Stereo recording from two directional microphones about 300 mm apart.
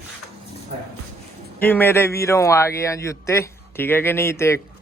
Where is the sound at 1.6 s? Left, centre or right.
Centre.